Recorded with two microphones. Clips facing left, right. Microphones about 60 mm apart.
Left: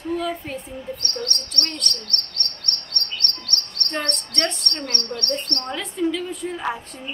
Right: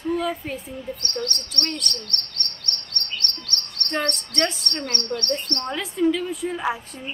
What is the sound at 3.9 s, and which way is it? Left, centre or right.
Chirp, centre.